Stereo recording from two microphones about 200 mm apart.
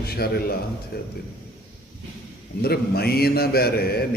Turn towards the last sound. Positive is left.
turn(degrees=50)  # may be behind; listen again after turning